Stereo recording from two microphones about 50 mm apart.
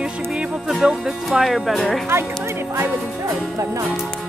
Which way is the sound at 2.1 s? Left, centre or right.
Right.